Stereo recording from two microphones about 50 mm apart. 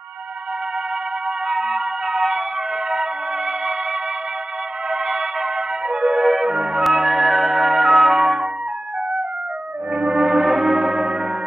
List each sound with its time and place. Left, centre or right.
1.5 s music: centre
4.9 s music: centre
5.9 s music: centre
6.2 s music: centre
9.9 s music: centre